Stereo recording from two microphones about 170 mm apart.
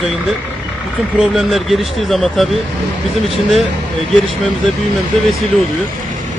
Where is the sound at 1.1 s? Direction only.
5° right (ahead or behind).